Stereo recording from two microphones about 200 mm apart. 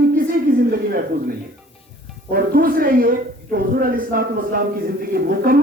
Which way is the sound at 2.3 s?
45° right (ahead or behind).